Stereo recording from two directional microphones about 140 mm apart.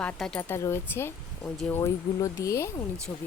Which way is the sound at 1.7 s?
20° left (ahead or behind).